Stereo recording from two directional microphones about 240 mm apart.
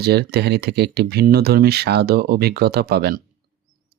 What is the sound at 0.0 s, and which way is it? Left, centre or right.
Speech, right.